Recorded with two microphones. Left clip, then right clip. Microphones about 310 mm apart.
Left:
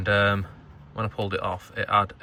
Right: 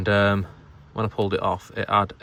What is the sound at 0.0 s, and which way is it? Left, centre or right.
Speech, centre.